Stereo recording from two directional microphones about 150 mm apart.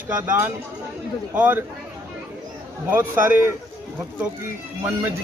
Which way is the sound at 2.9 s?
15° right (ahead or behind).